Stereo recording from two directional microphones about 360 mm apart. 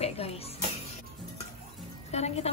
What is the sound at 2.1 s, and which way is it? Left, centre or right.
Speech, centre.